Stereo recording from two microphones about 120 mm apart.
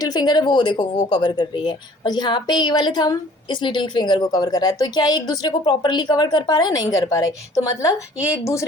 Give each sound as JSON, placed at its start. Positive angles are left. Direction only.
{"t": 0.0, "sound": "speech", "side_deg": 35}